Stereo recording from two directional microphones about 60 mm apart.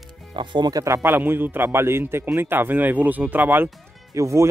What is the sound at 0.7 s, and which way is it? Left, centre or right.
Speech, right.